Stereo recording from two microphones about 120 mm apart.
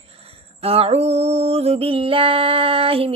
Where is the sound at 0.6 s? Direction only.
55° right (ahead or behind).